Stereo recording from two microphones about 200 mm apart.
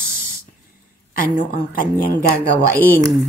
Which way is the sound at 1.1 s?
45° left (ahead or behind).